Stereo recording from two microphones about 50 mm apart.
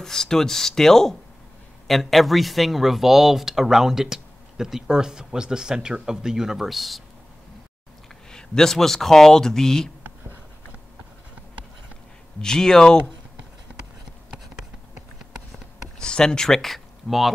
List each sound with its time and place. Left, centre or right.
0.0 s speech: centre
8.3 s speech: centre
12.4 s speech: centre
14.3 s a sound: centre
16.0 s speech: centre